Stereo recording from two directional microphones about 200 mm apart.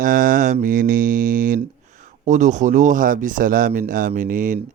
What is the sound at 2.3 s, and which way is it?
Speech, 35° right (ahead or behind).